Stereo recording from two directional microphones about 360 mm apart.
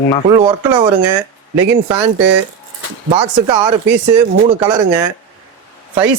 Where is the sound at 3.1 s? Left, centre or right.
Centre.